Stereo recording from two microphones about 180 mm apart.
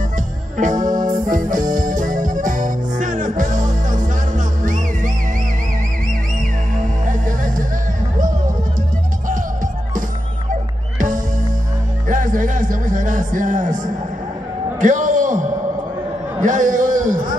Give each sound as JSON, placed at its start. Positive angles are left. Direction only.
{"t": 0.6, "sound": "music", "side_deg": -45}
{"t": 6.8, "sound": "music", "side_deg": -45}
{"t": 10.5, "sound": "music", "side_deg": -45}
{"t": 14.8, "sound": "a sound", "side_deg": -45}